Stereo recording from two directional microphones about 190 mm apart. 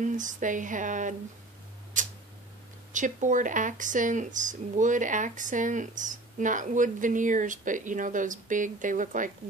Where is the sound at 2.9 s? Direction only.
40° right (ahead or behind).